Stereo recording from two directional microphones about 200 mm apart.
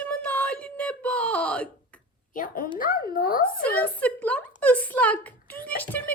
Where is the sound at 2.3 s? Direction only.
45° left (ahead or behind).